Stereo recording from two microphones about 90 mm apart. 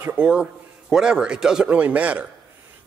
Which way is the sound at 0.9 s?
10° right (ahead or behind).